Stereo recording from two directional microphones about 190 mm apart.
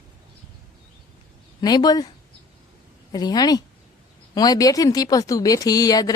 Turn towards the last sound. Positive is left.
turn(degrees=20)  # may be behind; listen again after turning